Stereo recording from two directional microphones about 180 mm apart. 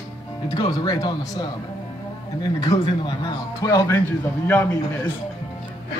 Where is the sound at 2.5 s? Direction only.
25° left (ahead or behind).